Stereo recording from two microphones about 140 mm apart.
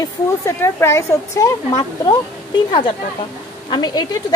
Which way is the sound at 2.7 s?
35° left (ahead or behind).